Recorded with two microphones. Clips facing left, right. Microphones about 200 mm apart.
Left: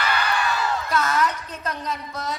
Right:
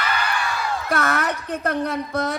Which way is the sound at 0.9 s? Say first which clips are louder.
Right 2 dB; 65° right (ahead or behind).